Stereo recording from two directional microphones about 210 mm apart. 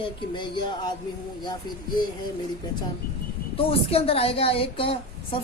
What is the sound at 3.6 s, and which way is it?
A woman's voice, 25° left (ahead or behind).